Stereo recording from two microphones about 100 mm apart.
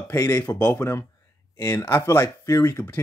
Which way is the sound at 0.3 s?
15° left (ahead or behind).